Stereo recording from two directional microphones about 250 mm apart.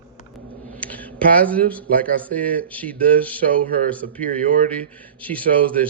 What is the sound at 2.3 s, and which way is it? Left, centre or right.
A man's voice, centre.